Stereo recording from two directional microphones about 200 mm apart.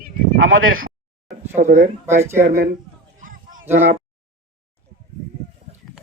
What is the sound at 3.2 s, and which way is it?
Honk, 40° right (ahead or behind).